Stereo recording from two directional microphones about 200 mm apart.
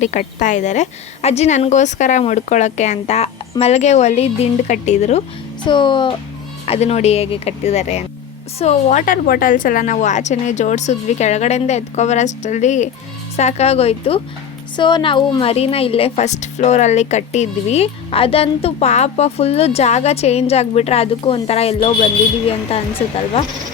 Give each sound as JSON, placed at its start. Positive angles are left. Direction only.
{"t": 0.0, "sound": "a woman's voice", "side_deg": 35}
{"t": 5.6, "sound": "a woman's voice", "side_deg": 25}